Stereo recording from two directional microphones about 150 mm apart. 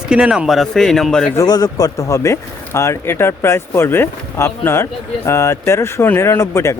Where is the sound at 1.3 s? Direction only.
25° left (ahead or behind).